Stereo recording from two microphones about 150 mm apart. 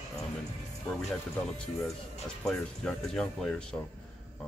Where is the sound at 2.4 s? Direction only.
5° left (ahead or behind).